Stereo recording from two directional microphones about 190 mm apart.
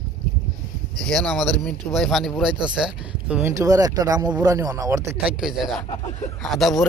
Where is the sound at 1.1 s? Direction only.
Centre (ahead or behind); by 5.0 s 15° right (ahead or behind).